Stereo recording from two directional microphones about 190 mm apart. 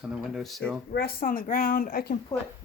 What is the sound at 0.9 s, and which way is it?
A woman's voice, 55° left (ahead or behind).